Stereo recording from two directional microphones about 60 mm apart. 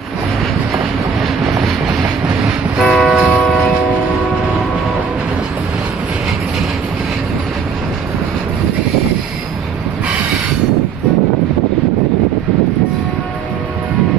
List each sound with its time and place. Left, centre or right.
2.8 s music: centre